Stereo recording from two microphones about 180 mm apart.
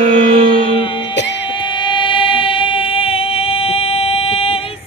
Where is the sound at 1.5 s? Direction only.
25° left (ahead or behind).